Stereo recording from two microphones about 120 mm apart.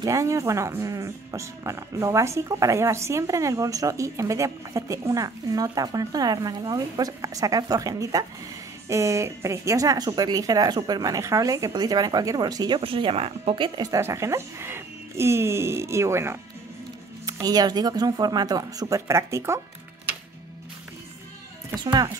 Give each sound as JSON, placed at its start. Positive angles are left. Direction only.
{"t": 0.0, "sound": "speech", "side_deg": -25}
{"t": 13.7, "sound": "speech", "side_deg": -30}
{"t": 21.7, "sound": "speech", "side_deg": -35}